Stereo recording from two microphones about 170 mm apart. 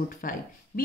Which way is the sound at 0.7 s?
40° left (ahead or behind).